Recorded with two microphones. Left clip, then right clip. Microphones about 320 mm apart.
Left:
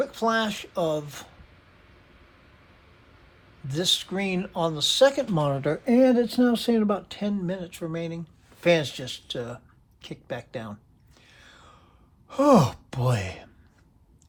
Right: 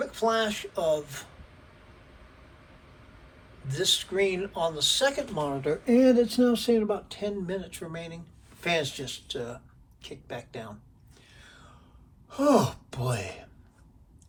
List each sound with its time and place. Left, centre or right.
0.0 s speech: centre
3.8 s speech: centre
5.5 s speech: left
11.3 s a sound: left
12.3 s speech: left